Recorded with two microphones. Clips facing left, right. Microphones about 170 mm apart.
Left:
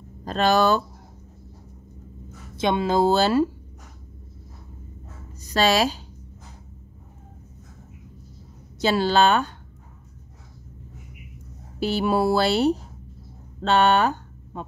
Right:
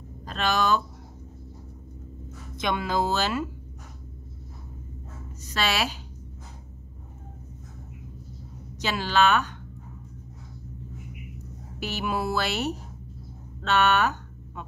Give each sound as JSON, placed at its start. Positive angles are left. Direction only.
{"t": 0.2, "sound": "speech", "side_deg": 40}
{"t": 2.5, "sound": "speech", "side_deg": 25}
{"t": 5.4, "sound": "a woman's voice", "side_deg": 35}
{"t": 8.8, "sound": "speech", "side_deg": 35}
{"t": 11.8, "sound": "speech", "side_deg": 30}
{"t": 13.6, "sound": "a sound", "side_deg": 30}